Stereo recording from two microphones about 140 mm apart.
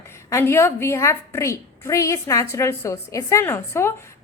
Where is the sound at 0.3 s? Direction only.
20° left (ahead or behind).